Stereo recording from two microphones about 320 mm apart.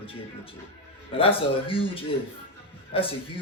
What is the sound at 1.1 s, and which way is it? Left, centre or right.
Speech, centre.